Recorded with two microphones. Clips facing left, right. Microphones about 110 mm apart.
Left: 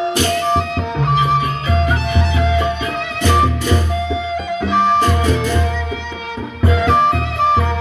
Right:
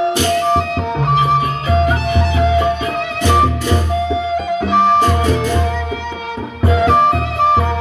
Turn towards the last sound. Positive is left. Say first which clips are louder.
# right 2 dB
turn(degrees=-45)  # may be behind; listen again after turning